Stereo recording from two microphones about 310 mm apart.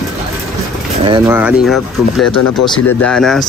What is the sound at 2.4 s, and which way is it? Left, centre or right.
Speech, left.